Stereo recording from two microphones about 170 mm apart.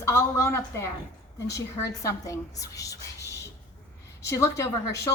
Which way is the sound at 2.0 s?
20° left (ahead or behind).